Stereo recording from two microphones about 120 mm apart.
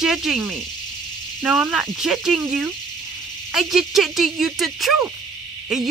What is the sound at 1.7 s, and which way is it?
Speech, 5° right (ahead or behind).